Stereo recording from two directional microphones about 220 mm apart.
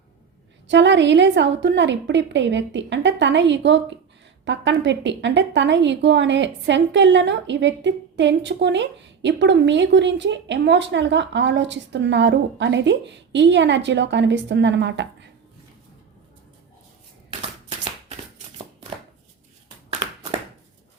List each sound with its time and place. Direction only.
0.7 s a woman's voice: 55° right (ahead or behind)